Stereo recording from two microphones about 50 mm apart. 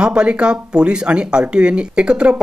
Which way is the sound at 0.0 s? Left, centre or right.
Centre.